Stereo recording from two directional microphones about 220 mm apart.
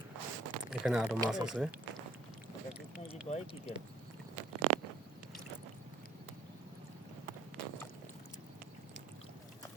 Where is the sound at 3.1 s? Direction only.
30° left (ahead or behind).